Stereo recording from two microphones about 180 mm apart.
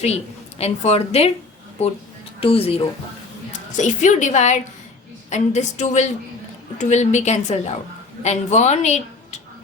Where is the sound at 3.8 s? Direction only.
45° left (ahead or behind).